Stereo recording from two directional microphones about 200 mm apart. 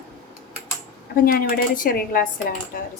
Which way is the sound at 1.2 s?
45° left (ahead or behind).